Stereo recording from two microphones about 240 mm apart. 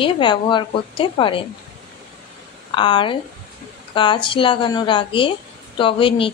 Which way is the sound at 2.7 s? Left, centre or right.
Centre.